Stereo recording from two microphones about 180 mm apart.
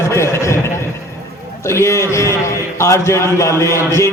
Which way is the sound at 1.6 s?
15° left (ahead or behind).